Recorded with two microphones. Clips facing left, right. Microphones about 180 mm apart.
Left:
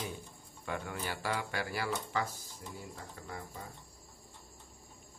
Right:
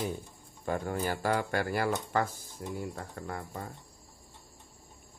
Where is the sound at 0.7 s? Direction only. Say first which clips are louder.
Right 7 dB; 40° right (ahead or behind); by 3.6 s 55° right (ahead or behind).